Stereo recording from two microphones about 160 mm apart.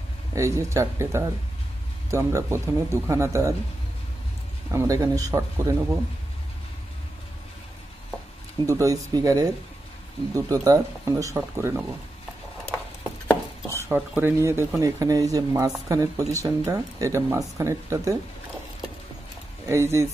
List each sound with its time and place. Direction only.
0.3 s speech: 20° right (ahead or behind)
4.6 s speech: 20° right (ahead or behind)
8.6 s speech: 20° right (ahead or behind)
13.8 s speech: 10° right (ahead or behind)
19.7 s speech: 15° right (ahead or behind)